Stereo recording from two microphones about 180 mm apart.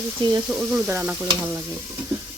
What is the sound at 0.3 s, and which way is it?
Speech, 20° right (ahead or behind).